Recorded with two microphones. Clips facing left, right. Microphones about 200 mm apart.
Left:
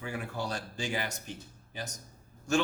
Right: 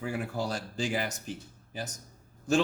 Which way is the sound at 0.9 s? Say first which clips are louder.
Right 3 dB; 35° right (ahead or behind).